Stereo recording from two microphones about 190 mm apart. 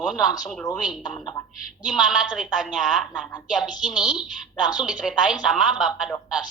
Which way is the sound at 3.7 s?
20° left (ahead or behind).